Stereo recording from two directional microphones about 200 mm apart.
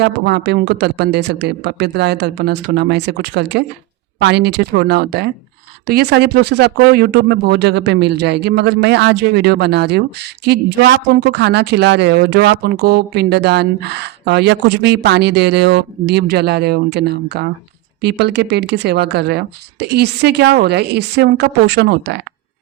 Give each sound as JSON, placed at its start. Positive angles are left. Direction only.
{"t": 0.0, "sound": "speech", "side_deg": -60}